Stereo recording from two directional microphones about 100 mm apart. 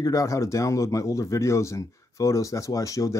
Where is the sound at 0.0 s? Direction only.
35° left (ahead or behind).